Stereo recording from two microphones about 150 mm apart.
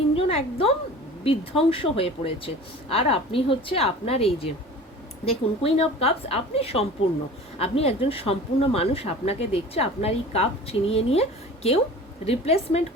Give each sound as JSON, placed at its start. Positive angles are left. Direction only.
{"t": 0.2, "sound": "a woman's voice", "side_deg": 40}